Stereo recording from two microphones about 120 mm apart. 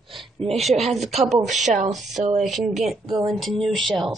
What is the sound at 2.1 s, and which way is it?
Speech, 75° right (ahead or behind).